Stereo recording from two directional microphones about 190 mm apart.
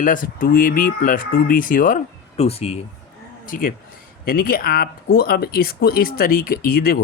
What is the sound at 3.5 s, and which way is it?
Speech, 50° left (ahead or behind).